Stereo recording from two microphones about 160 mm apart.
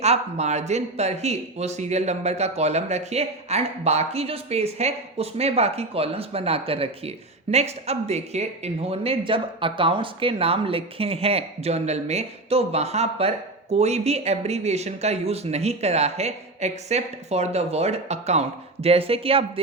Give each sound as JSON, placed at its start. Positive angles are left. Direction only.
{"t": 0.0, "sound": "speech", "side_deg": -45}